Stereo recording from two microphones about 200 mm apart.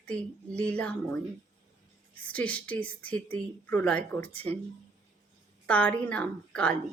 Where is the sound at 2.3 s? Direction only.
5° left (ahead or behind).